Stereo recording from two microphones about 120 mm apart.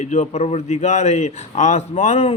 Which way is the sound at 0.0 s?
75° left (ahead or behind).